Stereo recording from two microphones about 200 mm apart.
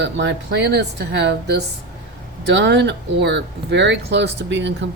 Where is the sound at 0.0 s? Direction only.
60° right (ahead or behind).